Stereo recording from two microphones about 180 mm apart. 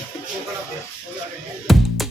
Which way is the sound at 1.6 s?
Centre (ahead or behind).